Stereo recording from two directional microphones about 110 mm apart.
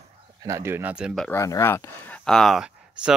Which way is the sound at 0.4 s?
25° right (ahead or behind).